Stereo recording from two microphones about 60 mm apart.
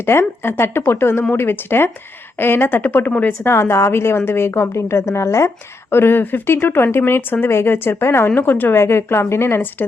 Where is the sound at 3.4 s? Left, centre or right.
Left.